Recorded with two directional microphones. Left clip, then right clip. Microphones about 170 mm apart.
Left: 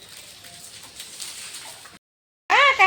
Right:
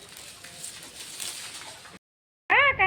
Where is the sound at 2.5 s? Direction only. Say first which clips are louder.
Left 5 dB; 15° left (ahead or behind).